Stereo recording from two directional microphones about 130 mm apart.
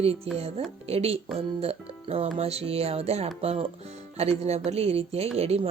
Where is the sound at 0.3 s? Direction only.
50° right (ahead or behind).